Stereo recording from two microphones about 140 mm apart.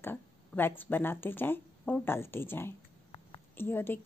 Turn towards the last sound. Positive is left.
turn(degrees=15)  # may be behind; listen again after turning